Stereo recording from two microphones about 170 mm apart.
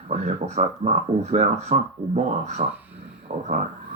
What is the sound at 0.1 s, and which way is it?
Speech, 40° right (ahead or behind).